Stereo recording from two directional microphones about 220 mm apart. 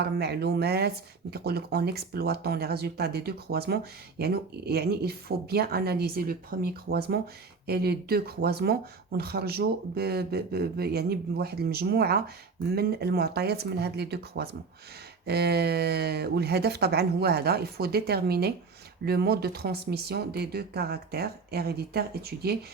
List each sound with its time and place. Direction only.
0.0 s speech: 50° right (ahead or behind)